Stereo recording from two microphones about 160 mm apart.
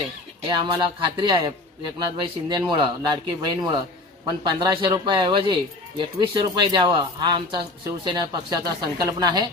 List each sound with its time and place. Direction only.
0.4 s a man's voice: 30° right (ahead or behind)